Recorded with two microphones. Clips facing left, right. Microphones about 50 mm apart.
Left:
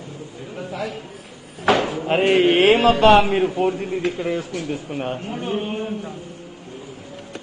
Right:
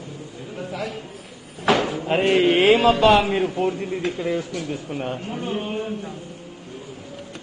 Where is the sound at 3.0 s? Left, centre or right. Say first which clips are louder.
Left 3 dB; centre.